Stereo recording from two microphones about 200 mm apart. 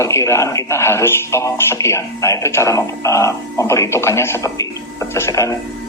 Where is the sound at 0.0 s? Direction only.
15° left (ahead or behind).